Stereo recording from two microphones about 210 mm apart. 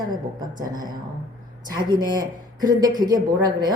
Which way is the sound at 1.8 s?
20° right (ahead or behind).